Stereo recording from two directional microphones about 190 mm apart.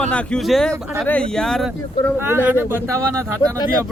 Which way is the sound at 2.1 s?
10° right (ahead or behind).